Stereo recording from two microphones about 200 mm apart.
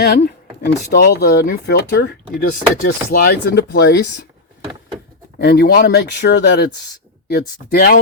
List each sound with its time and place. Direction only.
0.0 s a sound: 55° left (ahead or behind)
0.9 s speech: 50° left (ahead or behind)
5.4 s speech: 50° left (ahead or behind)